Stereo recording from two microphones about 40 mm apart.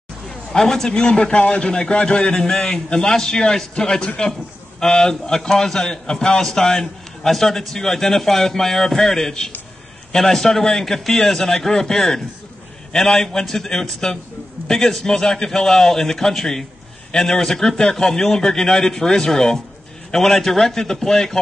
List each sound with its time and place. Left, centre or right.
0.3 s a man's voice: centre